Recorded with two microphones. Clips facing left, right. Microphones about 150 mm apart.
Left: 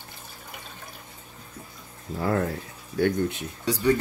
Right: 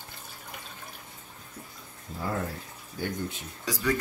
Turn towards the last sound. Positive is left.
turn(degrees=65)  # may be behind; listen again after turning